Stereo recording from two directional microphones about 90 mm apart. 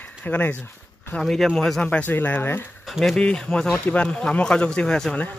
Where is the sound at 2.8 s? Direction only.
Centre (ahead or behind).